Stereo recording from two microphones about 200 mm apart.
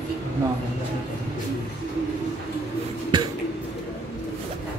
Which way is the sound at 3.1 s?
25° right (ahead or behind).